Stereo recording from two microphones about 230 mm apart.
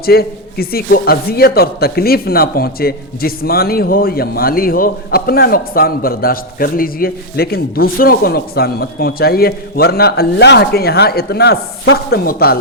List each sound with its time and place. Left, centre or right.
0.0 s a man's voice: left